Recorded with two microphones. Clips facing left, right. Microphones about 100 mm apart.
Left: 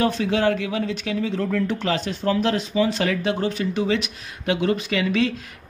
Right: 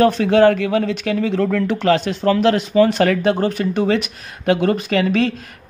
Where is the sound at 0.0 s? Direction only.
55° right (ahead or behind).